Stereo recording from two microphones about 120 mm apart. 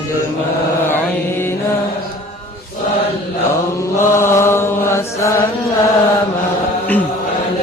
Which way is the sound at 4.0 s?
20° left (ahead or behind).